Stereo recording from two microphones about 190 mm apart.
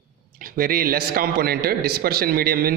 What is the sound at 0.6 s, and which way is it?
A man's voice, 50° right (ahead or behind).